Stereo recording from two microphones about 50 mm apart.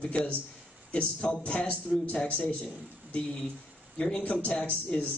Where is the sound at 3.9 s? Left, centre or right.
Left.